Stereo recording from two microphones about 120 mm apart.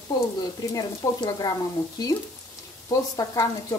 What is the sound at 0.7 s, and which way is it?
Frying, 30° left (ahead or behind).